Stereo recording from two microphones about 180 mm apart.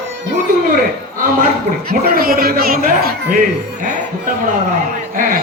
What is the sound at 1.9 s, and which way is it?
Speech, 55° right (ahead or behind).